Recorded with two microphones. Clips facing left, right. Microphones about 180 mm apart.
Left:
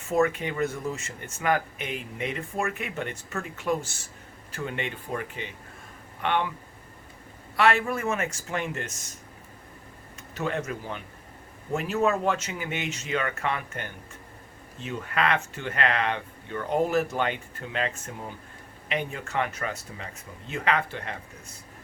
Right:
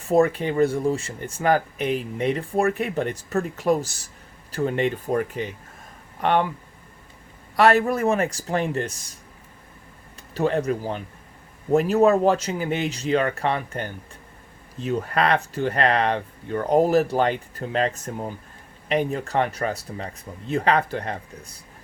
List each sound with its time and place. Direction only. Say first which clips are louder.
0.0 s speech: right 5 dB; 35° right (ahead or behind)
7.5 s speech: right 6 dB; 40° right (ahead or behind)
10.3 s speech: right 8 dB; 35° right (ahead or behind)